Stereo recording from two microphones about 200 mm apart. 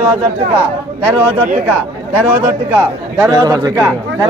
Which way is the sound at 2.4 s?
10° right (ahead or behind).